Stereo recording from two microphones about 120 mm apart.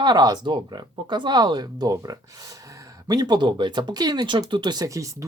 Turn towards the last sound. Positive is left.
turn(degrees=-30)  # may be behind; listen again after turning